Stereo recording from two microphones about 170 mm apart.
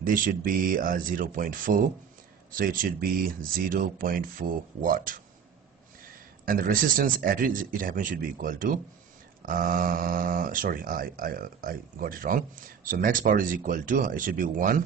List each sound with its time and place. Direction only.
0.0 s speech: 50° right (ahead or behind)
6.4 s speech: 55° right (ahead or behind)